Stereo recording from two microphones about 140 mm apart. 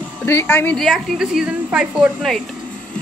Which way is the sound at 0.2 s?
15° left (ahead or behind).